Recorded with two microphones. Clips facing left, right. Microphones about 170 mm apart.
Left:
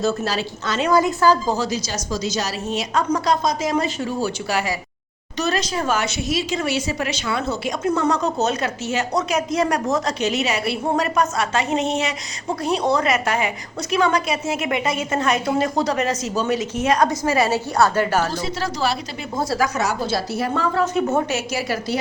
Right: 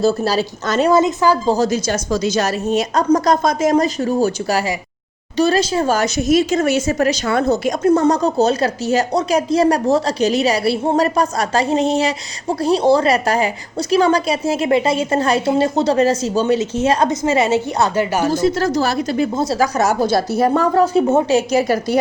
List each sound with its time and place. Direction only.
0.0 s speech: 35° right (ahead or behind)
0.9 s a woman's voice: 20° right (ahead or behind)
1.5 s a woman's voice: 45° right (ahead or behind)
5.4 s speech: 30° right (ahead or behind); by 18.3 s 10° right (ahead or behind)
18.3 s a woman's voice: 45° right (ahead or behind)
19.4 s a woman's voice: 20° right (ahead or behind)
19.6 s speech: 40° right (ahead or behind)